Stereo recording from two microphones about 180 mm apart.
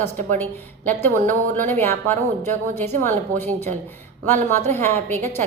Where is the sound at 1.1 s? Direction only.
45° right (ahead or behind).